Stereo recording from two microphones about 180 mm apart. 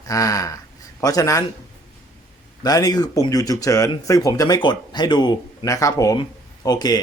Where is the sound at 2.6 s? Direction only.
20° left (ahead or behind).